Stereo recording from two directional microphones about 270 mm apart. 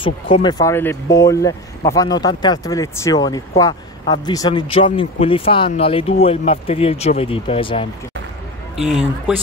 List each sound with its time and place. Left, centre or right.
0.0 s speech: centre
8.8 s speech: centre